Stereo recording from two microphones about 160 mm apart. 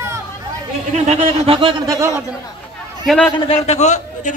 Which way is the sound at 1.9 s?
20° right (ahead or behind).